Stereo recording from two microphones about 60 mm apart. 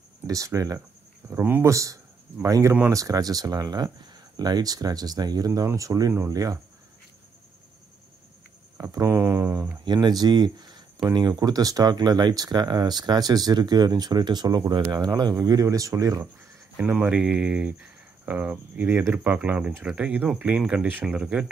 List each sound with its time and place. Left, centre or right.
0.3 s speech: right
1.3 s speech: right
1.6 s speech: right
2.4 s speech: right
5.7 s speech: right
8.8 s speech: right
11.1 s speech: right
16.7 s speech: right